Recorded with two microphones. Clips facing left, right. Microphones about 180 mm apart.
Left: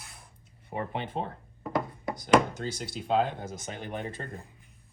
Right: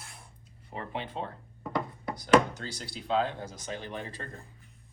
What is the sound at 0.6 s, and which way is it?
Speech, 55° left (ahead or behind).